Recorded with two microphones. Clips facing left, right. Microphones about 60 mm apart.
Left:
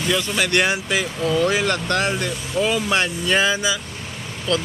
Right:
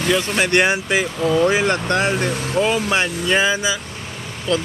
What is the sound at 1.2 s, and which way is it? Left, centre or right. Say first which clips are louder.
Speech: right 3 dB; right.